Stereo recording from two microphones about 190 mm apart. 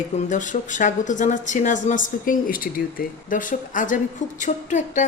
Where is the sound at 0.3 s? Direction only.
40° left (ahead or behind).